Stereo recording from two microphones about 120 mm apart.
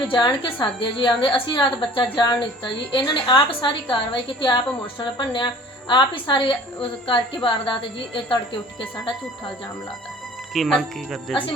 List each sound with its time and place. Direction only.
0.1 s a woman's voice: 40° left (ahead or behind)
10.5 s speech: centre (ahead or behind)